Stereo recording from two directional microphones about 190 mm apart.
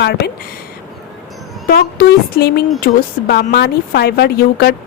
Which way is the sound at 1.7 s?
55° left (ahead or behind).